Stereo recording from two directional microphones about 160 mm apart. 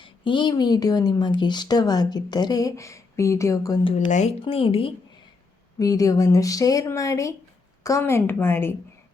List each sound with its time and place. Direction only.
0.0 s speech: 30° left (ahead or behind)
4.1 s speech: 40° left (ahead or behind)
5.8 s a woman's voice: 20° left (ahead or behind)